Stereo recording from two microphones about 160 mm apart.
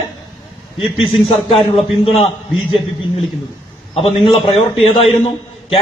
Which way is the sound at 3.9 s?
35° left (ahead or behind).